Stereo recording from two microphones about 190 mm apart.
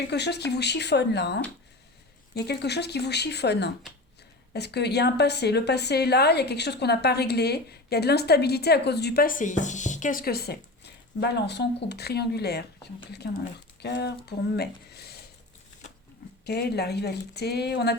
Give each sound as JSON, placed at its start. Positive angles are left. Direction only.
{"t": 0.1, "sound": "a woman's voice", "side_deg": 60}
{"t": 13.8, "sound": "a woman's voice", "side_deg": 60}
{"t": 16.5, "sound": "a woman's voice", "side_deg": 60}